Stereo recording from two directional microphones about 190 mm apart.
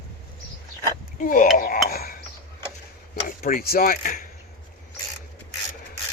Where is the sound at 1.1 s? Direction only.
45° left (ahead or behind).